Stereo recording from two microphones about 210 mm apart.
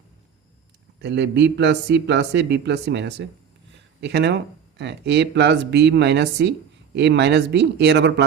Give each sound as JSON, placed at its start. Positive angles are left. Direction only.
{"t": 1.0, "sound": "speech", "side_deg": -55}